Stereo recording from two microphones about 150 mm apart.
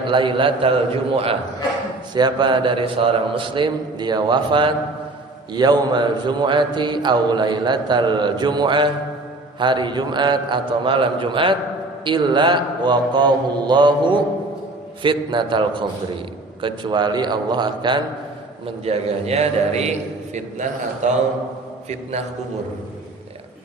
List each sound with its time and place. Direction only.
0.0 s a man's voice: 35° right (ahead or behind)
18.6 s a man's voice: 45° right (ahead or behind)